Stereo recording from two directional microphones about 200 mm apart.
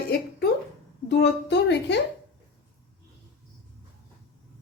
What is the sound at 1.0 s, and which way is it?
Speech, 60° left (ahead or behind).